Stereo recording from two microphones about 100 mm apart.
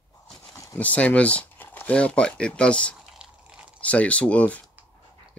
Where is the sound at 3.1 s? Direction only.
10° right (ahead or behind).